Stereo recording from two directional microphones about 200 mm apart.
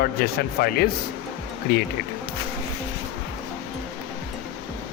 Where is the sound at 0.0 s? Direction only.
50° left (ahead or behind).